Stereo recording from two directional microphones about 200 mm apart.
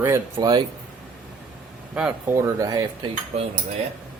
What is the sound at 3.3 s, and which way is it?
Cutlery, 35° right (ahead or behind).